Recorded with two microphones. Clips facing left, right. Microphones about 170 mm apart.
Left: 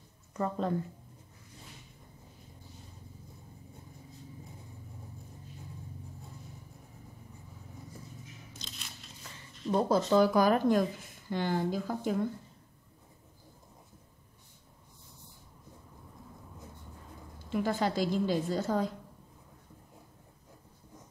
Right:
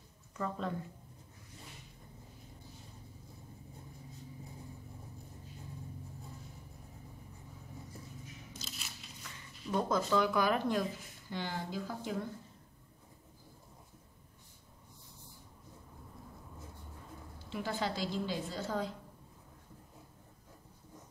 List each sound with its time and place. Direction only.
0.3 s speech: 40° left (ahead or behind)
8.5 s crunch: 5° right (ahead or behind)
9.7 s a woman's voice: 30° left (ahead or behind); by 12.1 s 50° left (ahead or behind)
17.5 s a woman's voice: 45° left (ahead or behind)